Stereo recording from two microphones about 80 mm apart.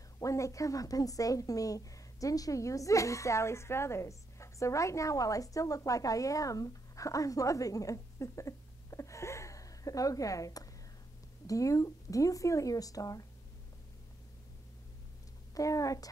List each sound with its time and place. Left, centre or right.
0.2 s a woman's voice: left
15.5 s speech: left